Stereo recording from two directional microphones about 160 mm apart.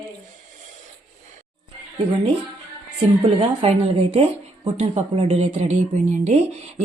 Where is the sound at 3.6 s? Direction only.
40° right (ahead or behind).